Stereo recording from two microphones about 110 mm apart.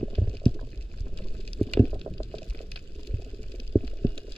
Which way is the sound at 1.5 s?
55° left (ahead or behind).